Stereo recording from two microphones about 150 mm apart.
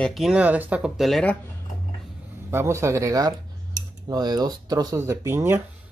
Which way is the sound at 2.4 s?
15° right (ahead or behind).